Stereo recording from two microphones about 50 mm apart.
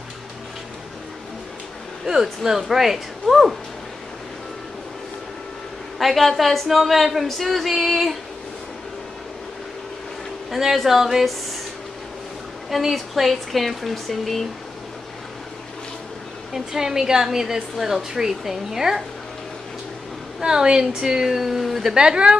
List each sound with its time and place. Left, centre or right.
2.0 s a woman's voice: centre
5.9 s a woman's voice: centre
10.5 s a woman's voice: centre
12.6 s a woman's voice: centre
16.5 s a woman's voice: centre
20.3 s a woman's voice: centre
21.9 s a woman's voice: centre